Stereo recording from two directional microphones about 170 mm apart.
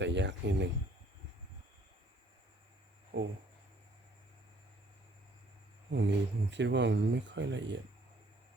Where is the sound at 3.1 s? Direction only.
90° right.